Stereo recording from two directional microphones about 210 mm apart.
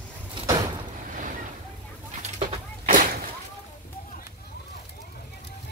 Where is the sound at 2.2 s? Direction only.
35° right (ahead or behind).